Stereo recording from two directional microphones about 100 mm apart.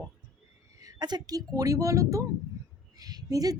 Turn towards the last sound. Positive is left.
turn(degrees=-40)  # may be behind; listen again after turning